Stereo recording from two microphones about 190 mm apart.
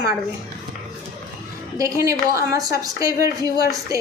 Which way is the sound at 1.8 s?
15° right (ahead or behind).